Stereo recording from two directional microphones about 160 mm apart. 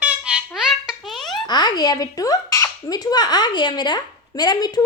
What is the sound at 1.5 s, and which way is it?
A child's voice, 25° left (ahead or behind).